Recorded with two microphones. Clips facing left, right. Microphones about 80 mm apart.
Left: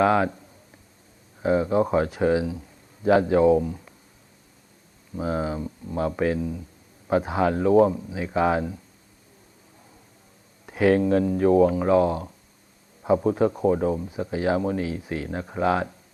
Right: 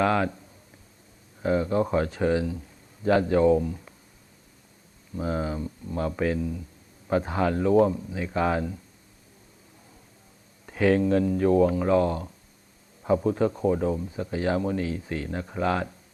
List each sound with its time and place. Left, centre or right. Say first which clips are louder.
0.0 s speech: left 3 dB; centre
1.4 s speech: left 3 dB; centre
5.1 s speech: left 2 dB; centre
10.7 s speech: left 2 dB; centre